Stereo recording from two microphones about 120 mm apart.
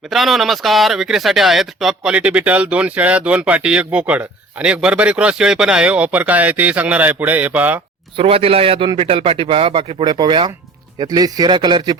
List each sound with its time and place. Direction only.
0.1 s speech: centre (ahead or behind)
8.1 s speech: 50° right (ahead or behind)
11.0 s speech: 30° right (ahead or behind)